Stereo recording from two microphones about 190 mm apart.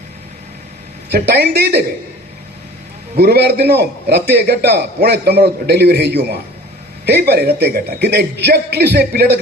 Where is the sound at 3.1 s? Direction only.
55° right (ahead or behind).